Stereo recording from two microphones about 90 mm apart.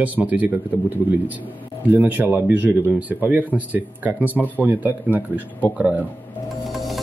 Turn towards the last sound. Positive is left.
turn(degrees=0)  # may be behind; listen again after turning